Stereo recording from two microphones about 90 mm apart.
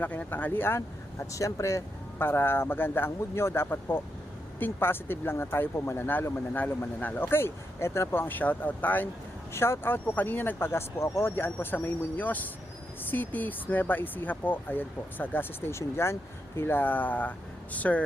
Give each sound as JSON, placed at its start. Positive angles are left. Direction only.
{"t": 0.0, "sound": "speech", "side_deg": 20}
{"t": 1.3, "sound": "speech", "side_deg": 35}
{"t": 2.1, "sound": "speech", "side_deg": 25}